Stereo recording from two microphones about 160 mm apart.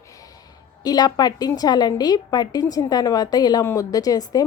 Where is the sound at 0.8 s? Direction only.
25° left (ahead or behind).